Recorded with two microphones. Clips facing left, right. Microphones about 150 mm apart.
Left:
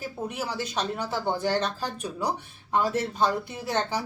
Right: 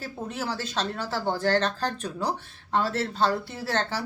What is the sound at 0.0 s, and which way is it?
Speech, 15° left (ahead or behind).